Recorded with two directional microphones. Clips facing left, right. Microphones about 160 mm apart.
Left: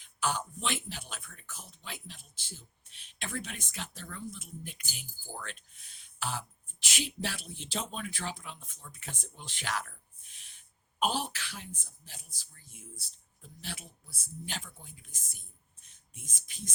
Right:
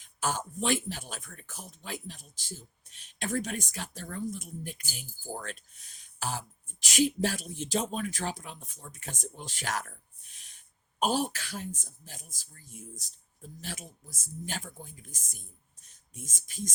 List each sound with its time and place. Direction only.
0.0 s a man's voice: 45° right (ahead or behind)